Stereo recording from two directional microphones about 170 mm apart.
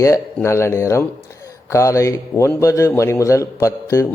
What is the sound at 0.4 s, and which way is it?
A man's voice, 15° left (ahead or behind).